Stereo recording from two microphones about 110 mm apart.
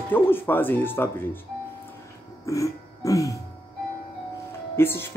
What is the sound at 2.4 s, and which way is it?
Throat clearing, 30° left (ahead or behind).